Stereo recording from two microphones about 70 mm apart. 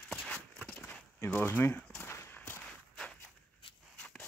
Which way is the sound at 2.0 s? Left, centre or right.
Left.